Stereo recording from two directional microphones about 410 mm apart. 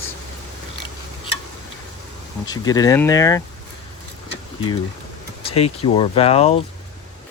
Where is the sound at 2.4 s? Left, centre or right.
Centre.